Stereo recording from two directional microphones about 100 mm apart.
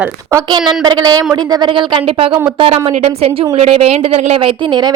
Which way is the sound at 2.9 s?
90° right.